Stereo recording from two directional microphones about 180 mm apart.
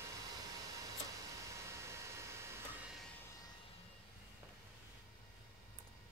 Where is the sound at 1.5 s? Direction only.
15° right (ahead or behind).